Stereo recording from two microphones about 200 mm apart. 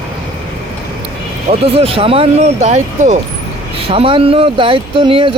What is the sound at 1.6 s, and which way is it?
Speech, 30° right (ahead or behind).